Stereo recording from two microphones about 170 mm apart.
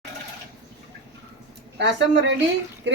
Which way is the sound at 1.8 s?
90° right.